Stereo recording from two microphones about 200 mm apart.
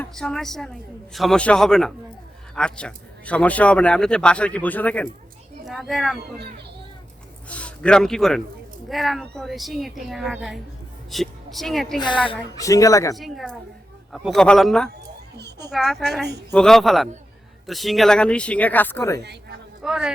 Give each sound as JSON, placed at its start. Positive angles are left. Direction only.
{"t": 0.0, "sound": "speech", "side_deg": 5}
{"t": 7.4, "sound": "a sound", "side_deg": 5}
{"t": 8.9, "sound": "speech", "side_deg": 0}
{"t": 11.9, "sound": "a woman's voice", "side_deg": 25}
{"t": 13.1, "sound": "speech", "side_deg": 0}
{"t": 15.4, "sound": "a sound", "side_deg": -55}
{"t": 15.7, "sound": "speech", "side_deg": 0}
{"t": 19.2, "sound": "speech", "side_deg": -55}
{"t": 19.8, "sound": "speech", "side_deg": -5}